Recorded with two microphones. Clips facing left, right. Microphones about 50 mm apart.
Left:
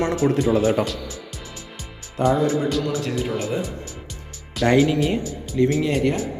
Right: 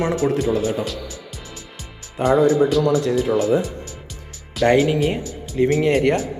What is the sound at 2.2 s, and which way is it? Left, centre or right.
Speech, centre.